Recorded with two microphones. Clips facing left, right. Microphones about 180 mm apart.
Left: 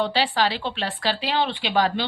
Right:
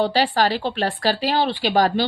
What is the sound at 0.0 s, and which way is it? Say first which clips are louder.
Speech: right 3 dB; 45° right (ahead or behind).